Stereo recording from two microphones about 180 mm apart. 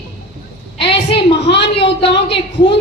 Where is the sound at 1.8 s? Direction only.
30° left (ahead or behind).